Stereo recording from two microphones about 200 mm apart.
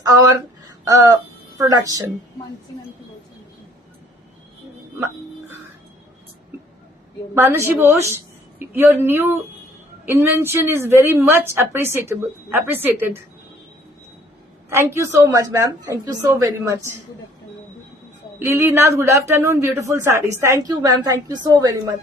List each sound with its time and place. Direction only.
0.0 s a woman's voice: 15° right (ahead or behind)
4.9 s music: 15° right (ahead or behind)
7.7 s a woman's voice: 10° right (ahead or behind)
14.7 s a man's voice: 10° right (ahead or behind)
18.3 s a man's voice: 10° right (ahead or behind)